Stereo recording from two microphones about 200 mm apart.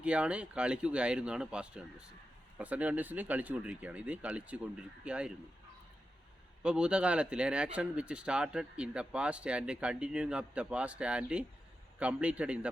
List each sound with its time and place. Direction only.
0.0 s speech: 5° right (ahead or behind)
6.6 s speech: 5° right (ahead or behind)